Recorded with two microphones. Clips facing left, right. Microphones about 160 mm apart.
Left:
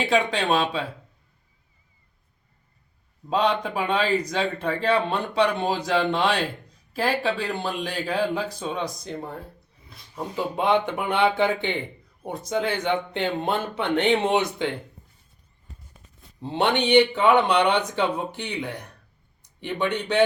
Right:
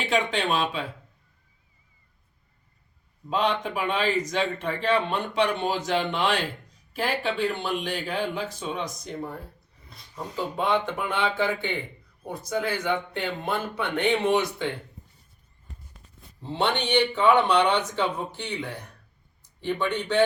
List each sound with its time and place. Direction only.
0.0 s speech: 35° left (ahead or behind)
3.2 s speech: 35° left (ahead or behind)
10.2 s speech: 15° left (ahead or behind)
16.5 s speech: 15° left (ahead or behind)
19.4 s a sound: 15° left (ahead or behind)